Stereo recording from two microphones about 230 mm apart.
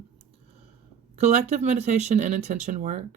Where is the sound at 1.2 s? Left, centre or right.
Right.